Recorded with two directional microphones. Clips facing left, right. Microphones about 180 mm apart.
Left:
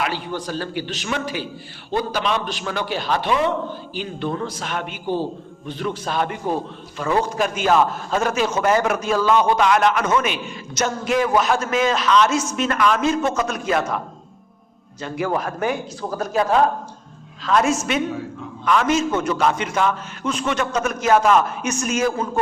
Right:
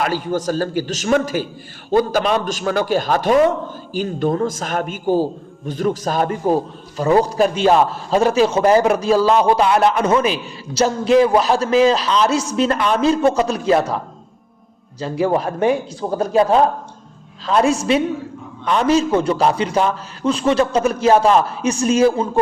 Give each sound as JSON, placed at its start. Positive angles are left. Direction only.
{"t": 0.0, "sound": "a man's voice", "side_deg": -45}
{"t": 15.0, "sound": "a man's voice", "side_deg": -30}